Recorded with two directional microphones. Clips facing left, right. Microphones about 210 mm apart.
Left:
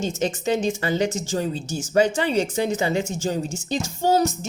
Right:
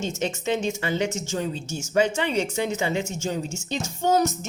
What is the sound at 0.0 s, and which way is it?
Speech, 35° left (ahead or behind).